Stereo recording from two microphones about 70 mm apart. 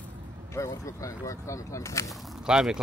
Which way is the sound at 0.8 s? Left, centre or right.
Left.